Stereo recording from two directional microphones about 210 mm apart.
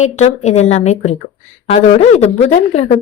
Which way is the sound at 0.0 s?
35° left (ahead or behind).